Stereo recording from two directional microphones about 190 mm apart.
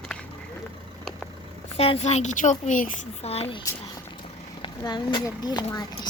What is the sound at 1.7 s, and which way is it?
A woman's voice, 30° left (ahead or behind).